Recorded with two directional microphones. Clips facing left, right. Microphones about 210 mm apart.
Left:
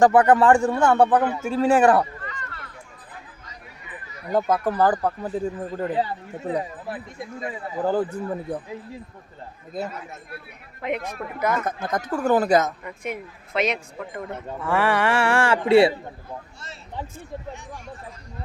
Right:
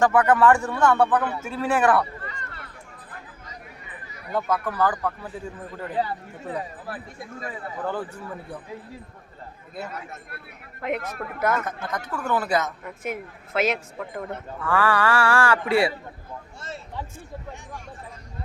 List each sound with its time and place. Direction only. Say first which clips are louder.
0.0 s speech: left 3 dB; 30° left (ahead or behind)
2.2 s a sound: left 1 dB; 30° right (ahead or behind)
4.3 s speech: left 4 dB; 40° left (ahead or behind)
6.6 s speech: left 4 dB; 20° left (ahead or behind)
7.9 s speech: left 8 dB; 35° left (ahead or behind)
10.8 s speech: left 1 dB; centre (ahead or behind)
11.9 s speech: left 7 dB; 40° left (ahead or behind)
12.8 s speech: even; 5° right (ahead or behind)
14.6 s speech: left 1 dB; 25° left (ahead or behind)